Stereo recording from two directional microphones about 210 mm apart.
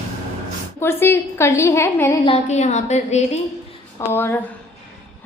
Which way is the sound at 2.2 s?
30° left (ahead or behind).